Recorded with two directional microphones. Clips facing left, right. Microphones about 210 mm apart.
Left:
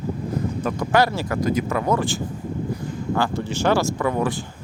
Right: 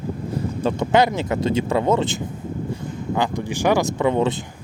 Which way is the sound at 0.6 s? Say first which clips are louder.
Right 3 dB; 20° right (ahead or behind).